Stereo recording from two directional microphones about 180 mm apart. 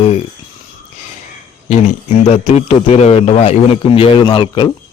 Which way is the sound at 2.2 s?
35° left (ahead or behind).